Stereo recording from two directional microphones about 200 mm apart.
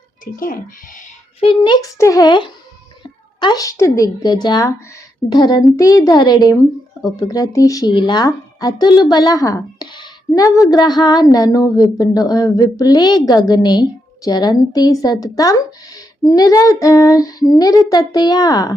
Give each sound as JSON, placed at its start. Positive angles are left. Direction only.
{"t": 0.3, "sound": "speech", "side_deg": 45}
{"t": 1.4, "sound": "a woman's voice", "side_deg": 25}